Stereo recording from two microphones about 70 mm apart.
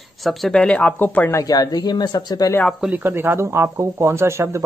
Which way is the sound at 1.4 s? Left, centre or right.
Left.